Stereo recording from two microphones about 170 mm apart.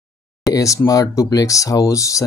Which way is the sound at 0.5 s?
20° left (ahead or behind).